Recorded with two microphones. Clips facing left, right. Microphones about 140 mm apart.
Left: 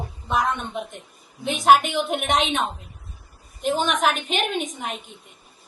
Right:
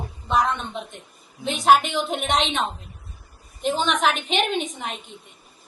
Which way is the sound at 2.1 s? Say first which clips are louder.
Left 1 dB; 50° left (ahead or behind).